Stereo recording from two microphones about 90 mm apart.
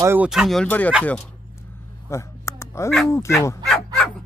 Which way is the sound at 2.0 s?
35° left (ahead or behind).